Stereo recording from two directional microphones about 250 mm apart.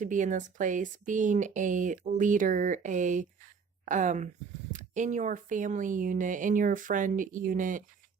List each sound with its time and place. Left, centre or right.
0.0 s speech: right